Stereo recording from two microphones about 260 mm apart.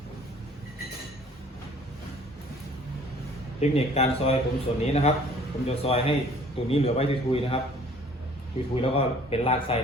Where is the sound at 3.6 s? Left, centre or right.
Left.